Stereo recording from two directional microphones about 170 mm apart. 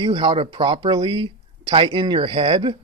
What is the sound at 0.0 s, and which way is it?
Speech, 30° right (ahead or behind).